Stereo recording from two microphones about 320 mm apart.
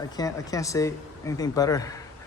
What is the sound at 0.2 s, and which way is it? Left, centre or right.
Speech, centre.